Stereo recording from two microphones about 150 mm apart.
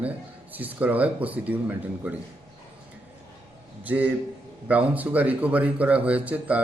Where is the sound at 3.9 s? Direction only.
10° right (ahead or behind).